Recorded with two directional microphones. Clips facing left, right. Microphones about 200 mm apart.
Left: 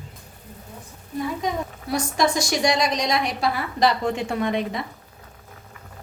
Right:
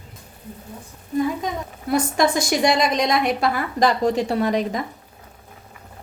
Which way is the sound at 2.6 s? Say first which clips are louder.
Right 3 dB; 55° right (ahead or behind).